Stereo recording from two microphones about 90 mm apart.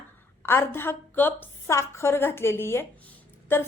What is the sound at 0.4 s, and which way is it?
A woman's voice, 25° left (ahead or behind).